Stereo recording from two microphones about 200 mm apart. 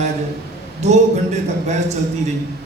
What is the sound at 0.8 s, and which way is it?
Speech, 35° right (ahead or behind).